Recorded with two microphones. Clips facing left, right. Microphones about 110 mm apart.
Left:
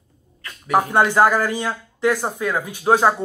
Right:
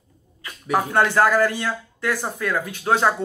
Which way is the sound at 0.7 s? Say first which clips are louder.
Left 3 dB; 15° left (ahead or behind).